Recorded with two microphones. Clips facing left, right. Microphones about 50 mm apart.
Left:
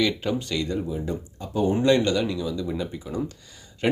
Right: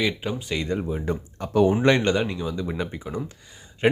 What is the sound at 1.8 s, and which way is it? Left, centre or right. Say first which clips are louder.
Speech: even; right.